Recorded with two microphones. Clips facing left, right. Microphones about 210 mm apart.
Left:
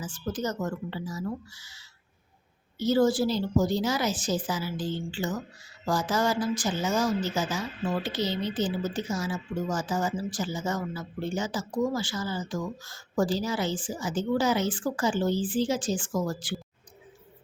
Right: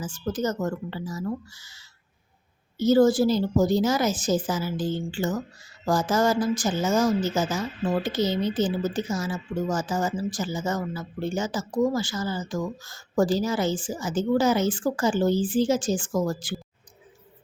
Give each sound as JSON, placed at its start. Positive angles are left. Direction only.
{"t": 0.0, "sound": "speech", "side_deg": -45}